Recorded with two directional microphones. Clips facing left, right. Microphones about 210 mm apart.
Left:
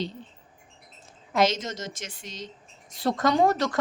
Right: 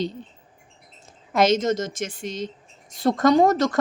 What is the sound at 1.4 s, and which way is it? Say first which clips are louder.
A woman's voice: right 6 dB; 50° right (ahead or behind).